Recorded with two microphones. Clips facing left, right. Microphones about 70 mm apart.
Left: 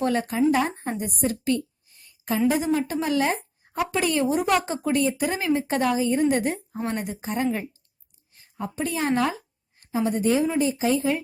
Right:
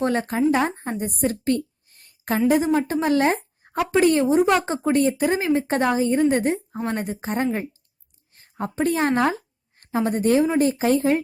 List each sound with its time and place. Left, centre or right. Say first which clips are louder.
0.0 s speech: right 1 dB; right
1.9 s a sound: right 1 dB; right
2.5 s a woman's voice: right 7 dB; right